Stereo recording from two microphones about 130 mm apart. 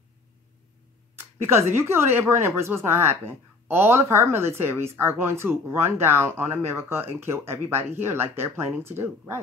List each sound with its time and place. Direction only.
1.4 s speech: 20° right (ahead or behind)